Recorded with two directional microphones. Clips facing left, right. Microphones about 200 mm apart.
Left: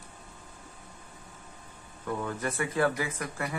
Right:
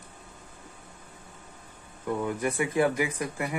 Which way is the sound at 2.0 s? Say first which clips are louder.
Right 4 dB; 15° right (ahead or behind).